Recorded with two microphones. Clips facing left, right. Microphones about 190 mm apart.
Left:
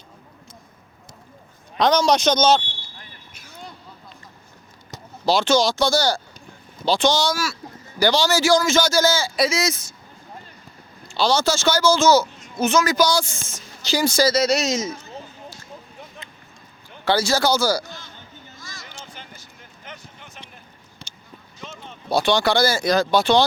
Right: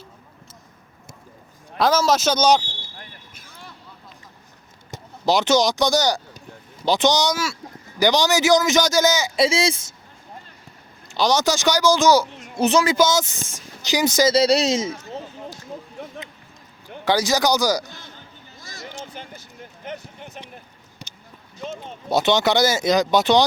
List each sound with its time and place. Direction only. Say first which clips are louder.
1.8 s speech: left 1 dB; 5° right (ahead or behind)
5.2 s speech: even; 20° right (ahead or behind)
11.1 s speech: even; 15° right (ahead or behind)
12.5 s speech: right 1 dB; 30° right (ahead or behind)
14.3 s a man's voice: right 3 dB; 30° right (ahead or behind)
17.1 s speech: even; 15° right (ahead or behind)
18.9 s a sound: right 5 dB; 50° right (ahead or behind)
21.6 s a sound: right 7 dB; 45° right (ahead or behind)
22.1 s speech: right 1 dB; 20° right (ahead or behind)